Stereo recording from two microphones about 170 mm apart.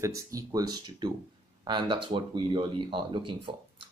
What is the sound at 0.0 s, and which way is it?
Speech, 20° right (ahead or behind).